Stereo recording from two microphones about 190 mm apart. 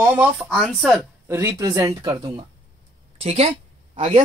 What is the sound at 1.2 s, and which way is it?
Speech, 15° right (ahead or behind).